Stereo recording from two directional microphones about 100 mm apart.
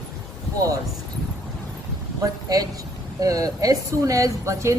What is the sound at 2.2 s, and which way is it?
A woman's voice, 40° right (ahead or behind).